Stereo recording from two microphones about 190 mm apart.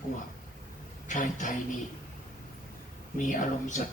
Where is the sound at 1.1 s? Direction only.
40° left (ahead or behind).